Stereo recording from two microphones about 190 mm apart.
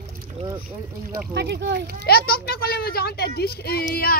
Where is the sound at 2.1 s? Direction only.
55° left (ahead or behind).